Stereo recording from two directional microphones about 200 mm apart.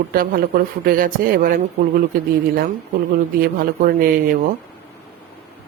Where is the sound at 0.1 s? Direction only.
50° right (ahead or behind).